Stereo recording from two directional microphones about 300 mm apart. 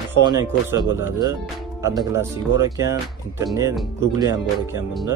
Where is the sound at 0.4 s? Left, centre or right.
Centre.